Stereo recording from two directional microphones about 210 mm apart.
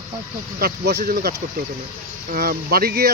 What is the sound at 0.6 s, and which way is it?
Speech, 50° right (ahead or behind).